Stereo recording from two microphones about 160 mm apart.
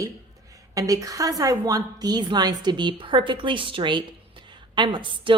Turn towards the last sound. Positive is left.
turn(degrees=-30)  # may be behind; listen again after turning